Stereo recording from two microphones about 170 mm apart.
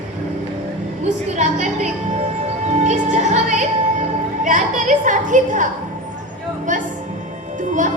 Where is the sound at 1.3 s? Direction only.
45° right (ahead or behind).